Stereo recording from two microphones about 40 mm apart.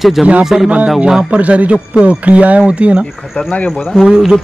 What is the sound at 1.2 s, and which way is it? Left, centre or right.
Speech, right.